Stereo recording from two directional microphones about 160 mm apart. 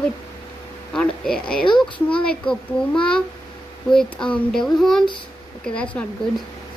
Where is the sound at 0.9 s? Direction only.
5° left (ahead or behind).